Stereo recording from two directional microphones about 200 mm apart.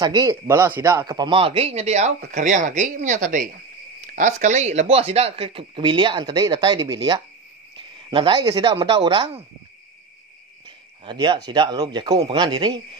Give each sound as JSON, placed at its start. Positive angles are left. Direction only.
{"t": 0.0, "sound": "speech", "side_deg": -20}
{"t": 11.1, "sound": "speech", "side_deg": -20}